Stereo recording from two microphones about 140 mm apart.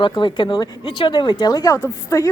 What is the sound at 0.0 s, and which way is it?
A woman's voice, 30° left (ahead or behind).